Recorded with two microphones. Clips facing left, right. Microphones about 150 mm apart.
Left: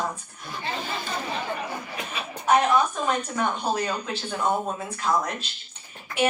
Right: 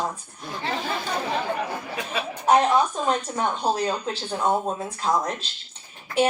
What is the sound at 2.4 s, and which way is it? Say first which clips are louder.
Speech: right 1 dB; 30° right (ahead or behind).